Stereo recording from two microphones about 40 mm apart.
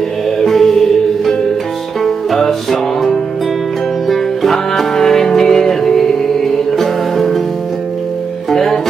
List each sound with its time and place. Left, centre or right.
0.4 s music: centre
8.5 s music: centre